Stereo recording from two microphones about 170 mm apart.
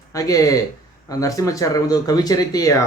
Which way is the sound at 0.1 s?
20° left (ahead or behind).